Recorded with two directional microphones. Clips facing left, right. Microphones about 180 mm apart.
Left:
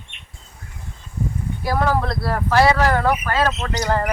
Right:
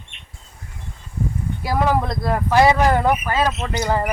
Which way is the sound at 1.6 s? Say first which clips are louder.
Right 1 dB; 10° right (ahead or behind).